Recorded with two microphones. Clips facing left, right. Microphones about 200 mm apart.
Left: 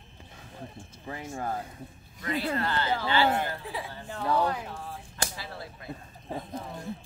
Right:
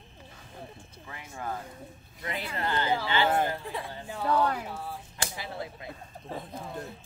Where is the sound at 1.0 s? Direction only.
35° left (ahead or behind).